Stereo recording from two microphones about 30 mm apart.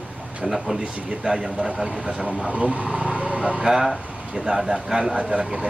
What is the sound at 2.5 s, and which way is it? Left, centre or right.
Speech, right.